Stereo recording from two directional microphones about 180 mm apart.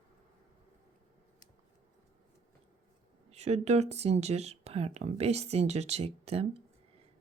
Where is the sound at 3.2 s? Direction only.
35° right (ahead or behind).